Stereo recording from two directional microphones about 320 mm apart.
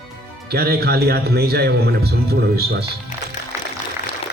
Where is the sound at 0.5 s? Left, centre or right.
Right.